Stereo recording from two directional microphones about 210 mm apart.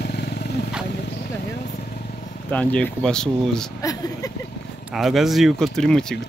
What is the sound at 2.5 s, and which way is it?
Speech, 5° left (ahead or behind).